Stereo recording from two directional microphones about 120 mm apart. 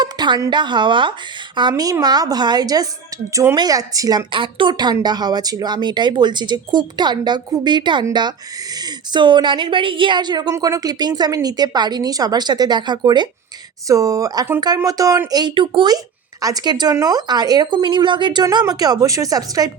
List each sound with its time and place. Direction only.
0.0 s a woman's voice: 35° right (ahead or behind)
4.3 s speech: 45° right (ahead or behind)
9.1 s speech: 40° right (ahead or behind)
16.4 s speech: 30° right (ahead or behind)